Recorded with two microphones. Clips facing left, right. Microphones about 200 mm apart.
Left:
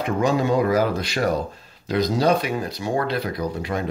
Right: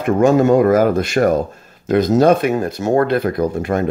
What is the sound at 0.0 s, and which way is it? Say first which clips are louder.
Speech: right 8 dB; 50° right (ahead or behind).